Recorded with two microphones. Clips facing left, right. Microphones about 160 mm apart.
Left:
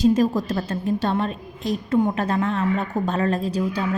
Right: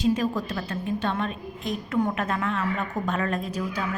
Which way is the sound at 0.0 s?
40° left (ahead or behind).